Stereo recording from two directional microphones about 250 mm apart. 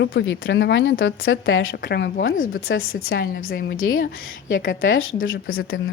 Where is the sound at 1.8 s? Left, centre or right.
Left.